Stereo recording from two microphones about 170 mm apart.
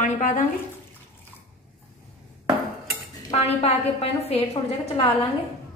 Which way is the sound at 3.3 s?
35° left (ahead or behind).